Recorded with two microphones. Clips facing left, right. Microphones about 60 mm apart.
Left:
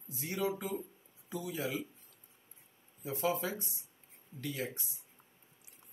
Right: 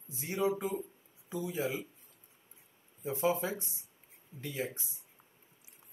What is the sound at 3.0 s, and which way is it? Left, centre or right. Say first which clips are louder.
Speech: right 3 dB; right.